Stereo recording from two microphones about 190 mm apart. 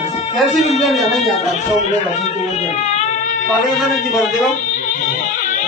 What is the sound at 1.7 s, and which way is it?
Speech, 35° left (ahead or behind).